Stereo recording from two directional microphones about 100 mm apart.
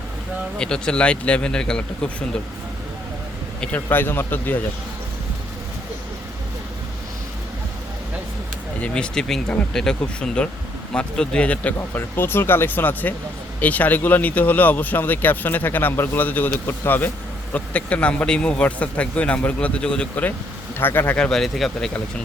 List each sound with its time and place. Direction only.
0.6 s speech: 10° left (ahead or behind)
3.6 s speech: 20° left (ahead or behind)
8.8 s speech: 10° left (ahead or behind)
21.2 s speech: 5° left (ahead or behind)